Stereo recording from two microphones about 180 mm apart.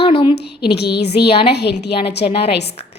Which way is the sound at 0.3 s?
65° left (ahead or behind).